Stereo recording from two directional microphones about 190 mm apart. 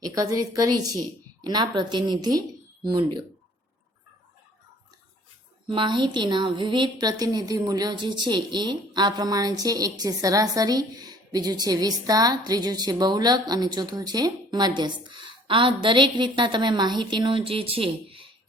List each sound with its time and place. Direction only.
0.1 s a woman's voice: 20° right (ahead or behind)
5.6 s a woman's voice: 25° right (ahead or behind)